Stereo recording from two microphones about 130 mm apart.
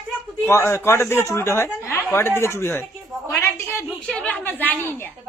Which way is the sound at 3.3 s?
20° left (ahead or behind).